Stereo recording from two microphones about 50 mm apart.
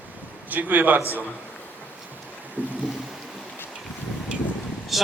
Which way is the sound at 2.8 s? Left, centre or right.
Centre.